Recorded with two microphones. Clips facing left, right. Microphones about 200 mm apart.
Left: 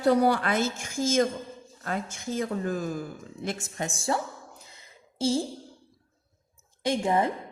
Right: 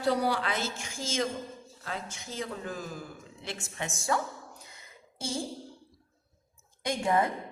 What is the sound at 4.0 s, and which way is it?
A woman's voice, 30° left (ahead or behind).